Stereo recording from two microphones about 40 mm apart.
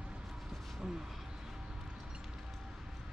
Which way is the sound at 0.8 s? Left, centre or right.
Centre.